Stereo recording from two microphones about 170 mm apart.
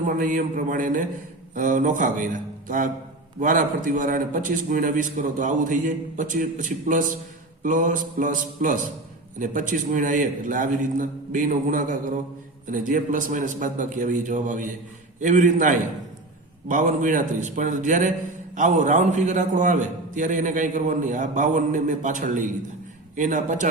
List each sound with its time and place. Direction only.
0.0 s a man's voice: 50° right (ahead or behind)